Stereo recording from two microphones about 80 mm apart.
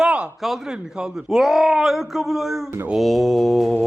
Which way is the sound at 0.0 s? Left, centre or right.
Centre.